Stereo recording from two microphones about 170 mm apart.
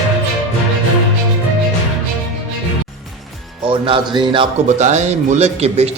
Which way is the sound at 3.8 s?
30° right (ahead or behind).